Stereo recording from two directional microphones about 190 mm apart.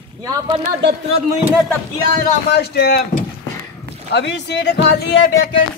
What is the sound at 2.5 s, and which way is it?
Speech, 60° left (ahead or behind).